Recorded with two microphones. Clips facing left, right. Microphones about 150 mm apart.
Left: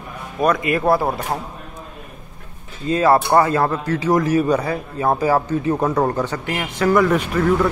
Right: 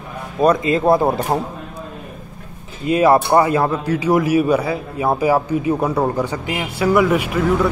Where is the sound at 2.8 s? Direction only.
15° right (ahead or behind).